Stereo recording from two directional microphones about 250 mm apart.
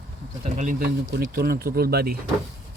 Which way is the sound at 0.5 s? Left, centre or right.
Right.